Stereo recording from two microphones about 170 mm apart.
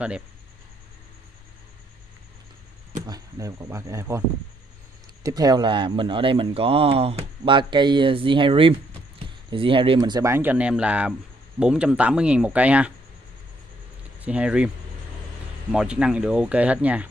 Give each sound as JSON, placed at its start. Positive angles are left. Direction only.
{"t": 3.1, "sound": "speech", "side_deg": -20}
{"t": 5.2, "sound": "speech", "side_deg": -20}
{"t": 14.2, "sound": "speech", "side_deg": -5}
{"t": 15.7, "sound": "speech", "side_deg": -5}